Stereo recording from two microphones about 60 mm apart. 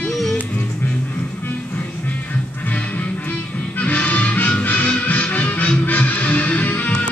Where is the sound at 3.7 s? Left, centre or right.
Left.